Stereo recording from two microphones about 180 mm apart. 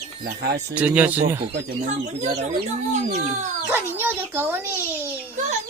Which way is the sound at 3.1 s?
40° right (ahead or behind).